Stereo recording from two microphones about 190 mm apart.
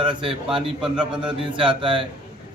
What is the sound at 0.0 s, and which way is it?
A man's voice, 25° right (ahead or behind).